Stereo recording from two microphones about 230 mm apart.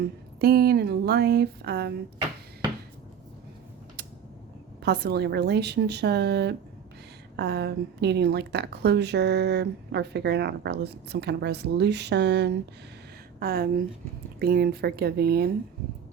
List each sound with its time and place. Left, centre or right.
0.0 s speech: right
4.9 s speech: right